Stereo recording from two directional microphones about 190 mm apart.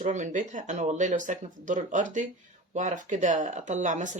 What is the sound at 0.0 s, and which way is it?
Speech, 40° right (ahead or behind).